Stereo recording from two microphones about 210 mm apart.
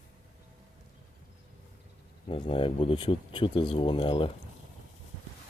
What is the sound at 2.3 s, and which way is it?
Speech, 25° left (ahead or behind).